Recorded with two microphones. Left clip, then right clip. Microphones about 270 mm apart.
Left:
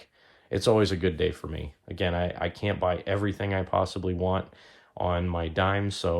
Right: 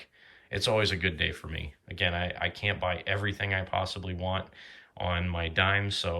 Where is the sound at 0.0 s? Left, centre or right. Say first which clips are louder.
Right 3 dB; centre.